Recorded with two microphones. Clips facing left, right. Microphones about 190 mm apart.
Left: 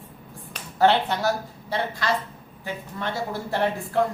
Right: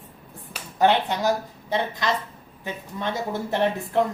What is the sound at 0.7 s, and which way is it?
A woman's voice, 15° right (ahead or behind).